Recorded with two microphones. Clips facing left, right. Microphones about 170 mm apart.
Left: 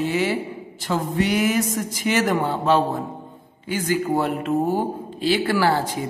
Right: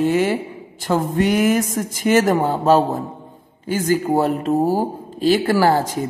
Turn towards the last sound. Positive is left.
turn(degrees=-45)  # may be behind; listen again after turning